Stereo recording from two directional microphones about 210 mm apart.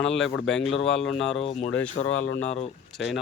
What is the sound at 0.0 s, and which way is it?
Speech, 5° left (ahead or behind).